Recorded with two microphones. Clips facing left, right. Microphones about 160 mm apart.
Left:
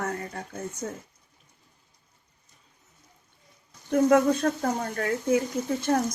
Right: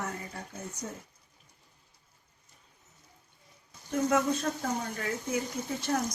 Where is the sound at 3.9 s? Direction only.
60° left (ahead or behind).